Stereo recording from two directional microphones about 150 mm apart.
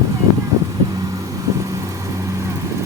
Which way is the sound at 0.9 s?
25° right (ahead or behind).